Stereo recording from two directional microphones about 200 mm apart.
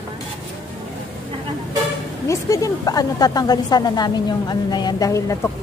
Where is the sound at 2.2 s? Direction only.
15° left (ahead or behind).